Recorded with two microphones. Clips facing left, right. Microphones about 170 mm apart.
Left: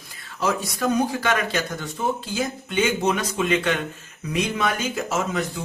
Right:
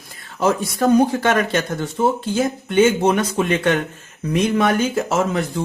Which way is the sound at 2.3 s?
50° right (ahead or behind).